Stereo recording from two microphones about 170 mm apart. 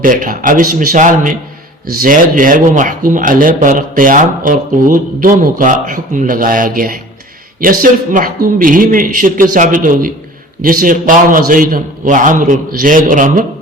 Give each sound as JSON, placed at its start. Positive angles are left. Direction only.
{"t": 0.0, "sound": "a man's voice", "side_deg": -55}